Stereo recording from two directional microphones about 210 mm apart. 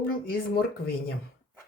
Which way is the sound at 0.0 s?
45° left (ahead or behind).